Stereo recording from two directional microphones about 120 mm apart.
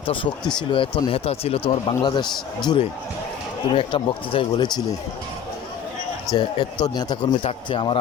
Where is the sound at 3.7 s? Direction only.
45° left (ahead or behind).